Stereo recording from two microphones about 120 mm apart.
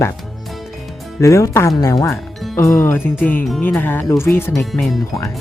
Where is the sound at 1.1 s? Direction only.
25° left (ahead or behind).